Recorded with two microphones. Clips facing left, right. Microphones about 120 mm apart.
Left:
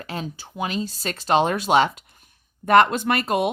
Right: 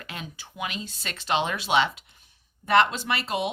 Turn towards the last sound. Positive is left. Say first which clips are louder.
# left 6 dB
turn(degrees=50)  # may be behind; listen again after turning